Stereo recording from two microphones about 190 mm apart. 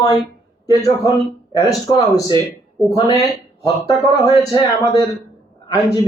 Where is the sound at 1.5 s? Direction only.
20° left (ahead or behind).